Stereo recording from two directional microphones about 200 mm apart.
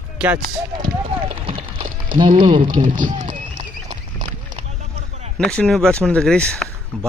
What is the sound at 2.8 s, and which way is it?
Run, 40° right (ahead or behind).